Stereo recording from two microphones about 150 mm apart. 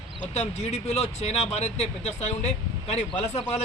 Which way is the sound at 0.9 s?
45° left (ahead or behind).